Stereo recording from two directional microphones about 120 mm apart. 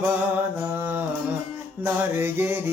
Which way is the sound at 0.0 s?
15° right (ahead or behind).